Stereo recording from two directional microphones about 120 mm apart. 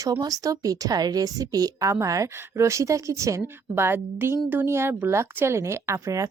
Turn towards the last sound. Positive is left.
turn(degrees=-25)  # may be behind; listen again after turning